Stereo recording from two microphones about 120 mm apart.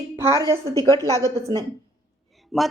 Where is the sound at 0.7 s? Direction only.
25° left (ahead or behind).